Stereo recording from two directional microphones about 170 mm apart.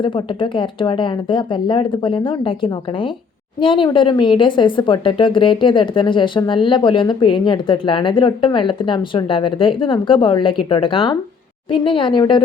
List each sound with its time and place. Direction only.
0.0 s a woman's voice: 30° left (ahead or behind)